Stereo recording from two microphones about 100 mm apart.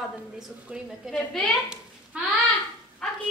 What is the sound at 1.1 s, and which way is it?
Speech, 10° left (ahead or behind).